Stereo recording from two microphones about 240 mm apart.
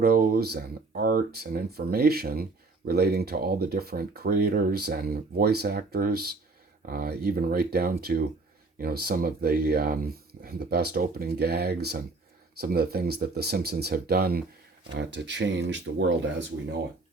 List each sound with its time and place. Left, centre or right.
0.0 s speech: right